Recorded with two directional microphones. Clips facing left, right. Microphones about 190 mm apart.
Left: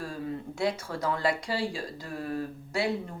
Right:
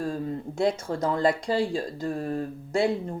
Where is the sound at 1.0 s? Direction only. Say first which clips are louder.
Right 5 dB; 45° right (ahead or behind).